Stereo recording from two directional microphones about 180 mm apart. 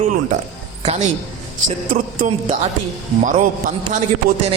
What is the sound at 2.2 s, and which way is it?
Speech, 40° right (ahead or behind).